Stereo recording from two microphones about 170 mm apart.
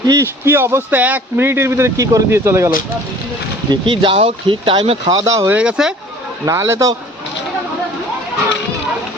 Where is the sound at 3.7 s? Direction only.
30° right (ahead or behind).